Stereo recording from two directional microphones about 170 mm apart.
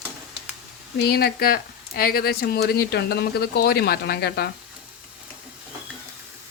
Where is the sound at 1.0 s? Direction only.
70° left (ahead or behind).